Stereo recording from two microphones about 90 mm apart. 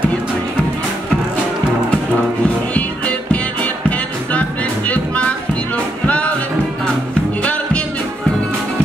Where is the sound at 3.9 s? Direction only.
15° left (ahead or behind).